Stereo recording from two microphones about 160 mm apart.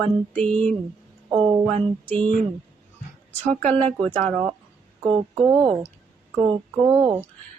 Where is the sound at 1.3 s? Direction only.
30° right (ahead or behind).